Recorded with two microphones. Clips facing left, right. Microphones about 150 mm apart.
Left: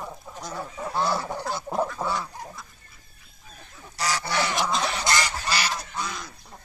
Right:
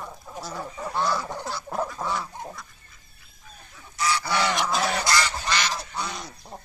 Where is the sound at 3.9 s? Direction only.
35° left (ahead or behind).